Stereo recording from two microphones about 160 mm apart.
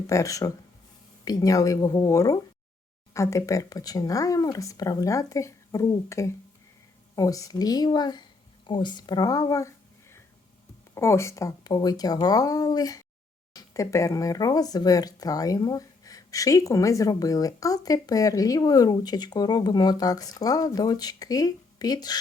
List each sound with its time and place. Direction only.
0.1 s speech: 20° left (ahead or behind)